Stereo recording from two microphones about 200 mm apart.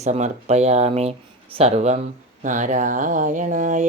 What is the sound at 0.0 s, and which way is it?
Speech, 35° right (ahead or behind).